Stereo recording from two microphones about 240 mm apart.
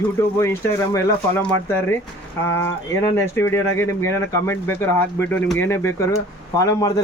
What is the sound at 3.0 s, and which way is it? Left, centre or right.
Speech, centre.